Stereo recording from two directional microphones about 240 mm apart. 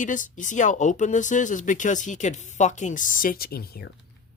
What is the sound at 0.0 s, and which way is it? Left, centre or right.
Speech, left.